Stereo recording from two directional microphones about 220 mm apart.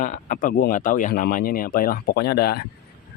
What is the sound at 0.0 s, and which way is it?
Speech, 35° left (ahead or behind).